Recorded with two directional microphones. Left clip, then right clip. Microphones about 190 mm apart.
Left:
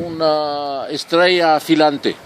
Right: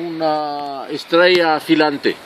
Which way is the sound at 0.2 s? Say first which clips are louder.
Left 3 dB; 40° left (ahead or behind).